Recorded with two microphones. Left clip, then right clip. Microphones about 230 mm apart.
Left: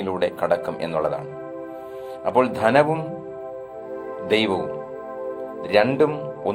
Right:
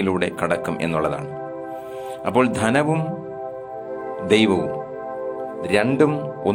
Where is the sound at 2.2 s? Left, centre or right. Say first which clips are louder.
Left 1 dB; right.